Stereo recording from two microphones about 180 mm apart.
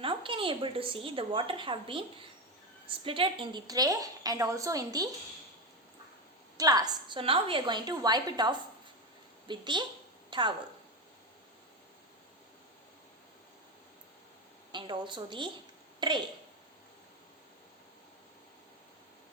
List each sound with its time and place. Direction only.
0.0 s a woman's voice: 30° right (ahead or behind)
6.6 s a woman's voice: 20° right (ahead or behind)
14.7 s a woman's voice: 25° right (ahead or behind)